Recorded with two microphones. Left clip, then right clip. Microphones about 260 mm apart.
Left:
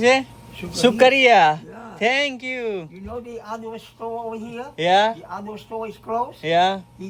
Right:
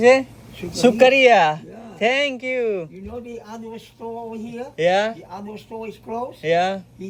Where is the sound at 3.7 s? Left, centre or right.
Left.